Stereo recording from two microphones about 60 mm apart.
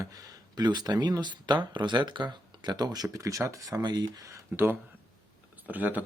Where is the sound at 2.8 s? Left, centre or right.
Right.